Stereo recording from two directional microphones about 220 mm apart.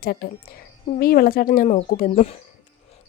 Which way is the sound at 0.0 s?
45° left (ahead or behind).